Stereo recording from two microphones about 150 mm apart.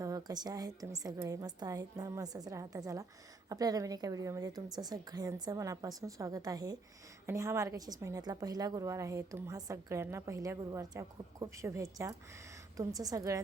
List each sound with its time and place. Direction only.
0.0 s a woman's voice: 25° right (ahead or behind)